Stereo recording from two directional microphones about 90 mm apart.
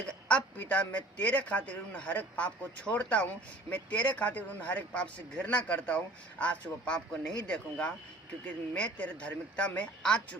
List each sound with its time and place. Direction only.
0.3 s a man's voice: 15° left (ahead or behind)